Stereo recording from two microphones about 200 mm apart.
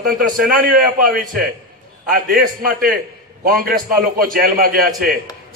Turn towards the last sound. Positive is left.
turn(degrees=-45)  # may be behind; listen again after turning